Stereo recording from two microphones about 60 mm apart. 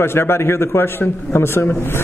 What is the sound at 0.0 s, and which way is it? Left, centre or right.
A man's voice, left.